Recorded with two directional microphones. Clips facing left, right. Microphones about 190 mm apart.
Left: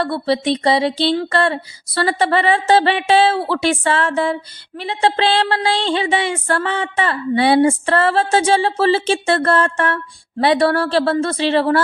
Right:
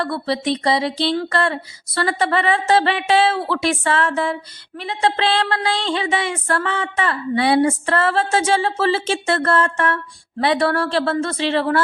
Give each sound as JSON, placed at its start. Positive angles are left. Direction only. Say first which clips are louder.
{"t": 0.0, "sound": "a woman's voice", "louder": "left 3 dB", "side_deg": 30}